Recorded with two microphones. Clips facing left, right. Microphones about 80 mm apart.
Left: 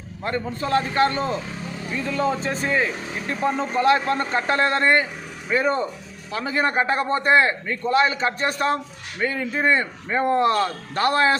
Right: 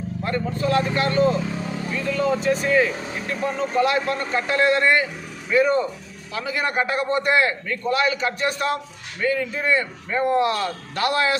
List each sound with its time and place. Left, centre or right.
0.3 s a man's voice: left